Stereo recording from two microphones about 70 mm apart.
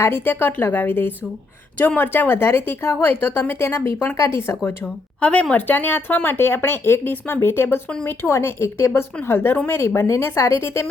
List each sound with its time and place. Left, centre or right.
0.0 s speech: left
5.2 s speech: centre; by 10.8 s left